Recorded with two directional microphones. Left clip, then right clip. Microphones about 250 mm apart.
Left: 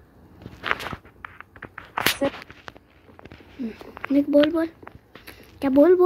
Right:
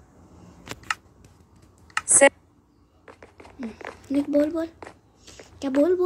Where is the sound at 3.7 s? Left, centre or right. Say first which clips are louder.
Left 4 dB; centre.